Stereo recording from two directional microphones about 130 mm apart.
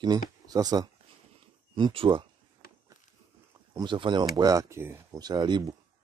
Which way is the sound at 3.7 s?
35° right (ahead or behind).